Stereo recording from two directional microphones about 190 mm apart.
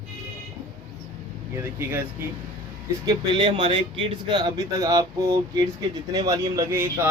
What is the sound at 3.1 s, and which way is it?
A man's voice, 25° right (ahead or behind).